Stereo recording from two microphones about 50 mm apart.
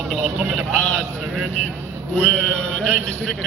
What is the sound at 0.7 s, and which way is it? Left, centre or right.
Speech, left.